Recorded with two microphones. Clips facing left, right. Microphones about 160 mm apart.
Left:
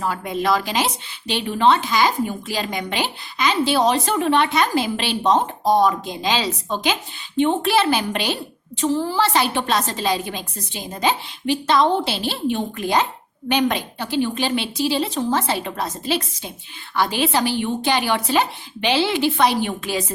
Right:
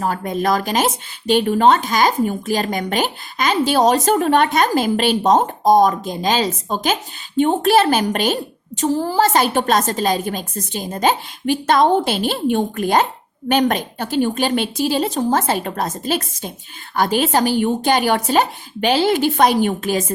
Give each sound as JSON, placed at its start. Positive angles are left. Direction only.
{"t": 0.0, "sound": "speech", "side_deg": -45}